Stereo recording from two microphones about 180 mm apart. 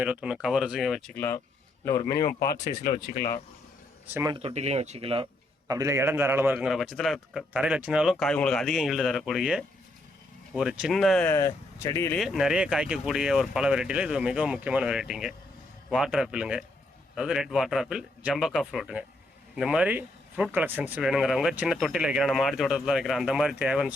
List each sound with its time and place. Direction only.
0.0 s speech: 5° right (ahead or behind); by 2.3 s 20° left (ahead or behind)
2.5 s speech: 50° left (ahead or behind)
4.1 s speech: 15° right (ahead or behind)
4.4 s speech: 35° right (ahead or behind)
5.6 s speech: 20° right (ahead or behind); by 11.3 s centre (ahead or behind)
11.3 s speech: 15° left (ahead or behind)
12.1 s speech: centre (ahead or behind)